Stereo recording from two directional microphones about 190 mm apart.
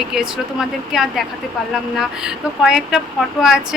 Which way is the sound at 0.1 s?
Centre (ahead or behind).